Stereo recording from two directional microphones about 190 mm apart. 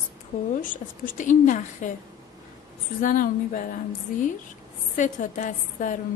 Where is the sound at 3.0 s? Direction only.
45° left (ahead or behind).